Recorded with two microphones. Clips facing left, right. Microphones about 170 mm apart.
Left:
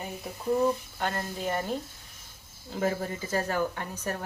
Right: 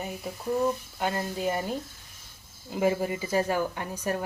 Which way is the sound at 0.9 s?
10° right (ahead or behind).